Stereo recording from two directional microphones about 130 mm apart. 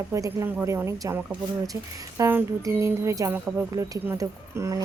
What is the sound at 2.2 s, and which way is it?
Speech, 20° right (ahead or behind).